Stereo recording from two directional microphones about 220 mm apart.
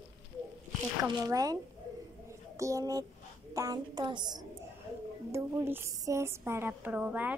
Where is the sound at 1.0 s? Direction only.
15° right (ahead or behind).